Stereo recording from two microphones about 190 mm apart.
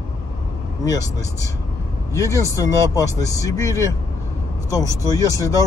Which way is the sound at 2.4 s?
15° left (ahead or behind).